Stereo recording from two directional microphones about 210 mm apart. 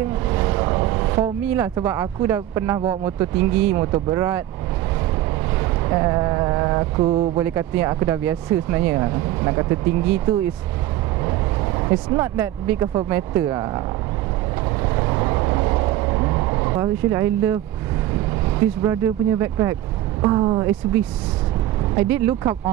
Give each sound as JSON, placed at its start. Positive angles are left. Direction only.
{"t": 0.3, "sound": "speech", "side_deg": -15}
{"t": 5.9, "sound": "a sound", "side_deg": -15}
{"t": 7.3, "sound": "speech", "side_deg": -10}
{"t": 12.1, "sound": "speech", "side_deg": -10}
{"t": 14.8, "sound": "vehicle", "side_deg": -20}
{"t": 18.8, "sound": "speech", "side_deg": -15}